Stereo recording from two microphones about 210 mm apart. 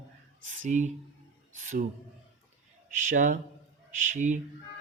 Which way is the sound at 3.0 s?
40° right (ahead or behind).